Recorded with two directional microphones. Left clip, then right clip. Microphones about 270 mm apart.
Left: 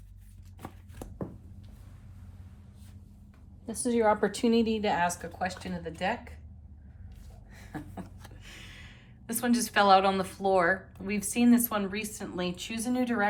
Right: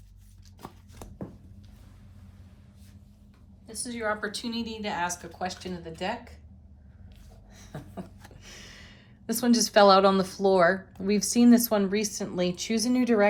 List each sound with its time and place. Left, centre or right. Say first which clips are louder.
3.8 s a woman's voice: left 5 dB; left; by 6.3 s centre
7.5 s a sound: even; centre
8.4 s speech: right 1 dB; centre